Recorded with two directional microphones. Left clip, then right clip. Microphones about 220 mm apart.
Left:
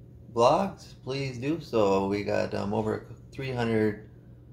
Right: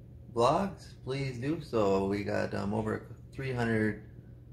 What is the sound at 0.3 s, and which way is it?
Speech, 5° left (ahead or behind).